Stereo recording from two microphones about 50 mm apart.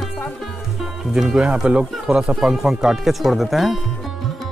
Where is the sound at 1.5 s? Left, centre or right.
Centre.